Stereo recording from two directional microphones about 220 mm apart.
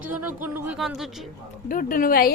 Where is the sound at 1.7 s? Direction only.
40° left (ahead or behind).